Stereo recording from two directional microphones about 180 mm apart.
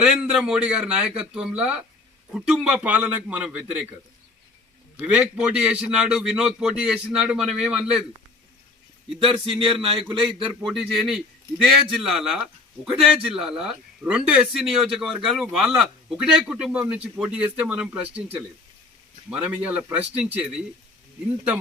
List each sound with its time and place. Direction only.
0.0 s a man's voice: 5° right (ahead or behind)
4.9 s a man's voice: 5° right (ahead or behind)
9.6 s a man's voice: 30° right (ahead or behind)
10.7 s a man's voice: centre (ahead or behind)
19.3 s a man's voice: 10° right (ahead or behind)